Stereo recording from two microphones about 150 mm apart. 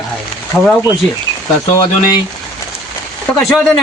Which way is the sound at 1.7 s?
25° left (ahead or behind).